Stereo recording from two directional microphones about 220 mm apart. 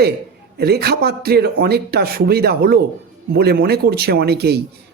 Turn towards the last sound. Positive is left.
turn(degrees=-45)  # may be behind; listen again after turning